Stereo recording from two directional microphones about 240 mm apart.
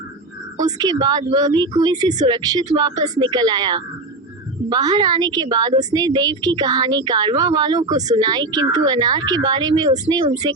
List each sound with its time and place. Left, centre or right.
0.6 s a woman's voice: centre